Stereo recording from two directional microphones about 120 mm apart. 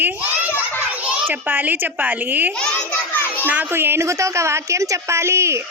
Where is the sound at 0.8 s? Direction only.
10° right (ahead or behind).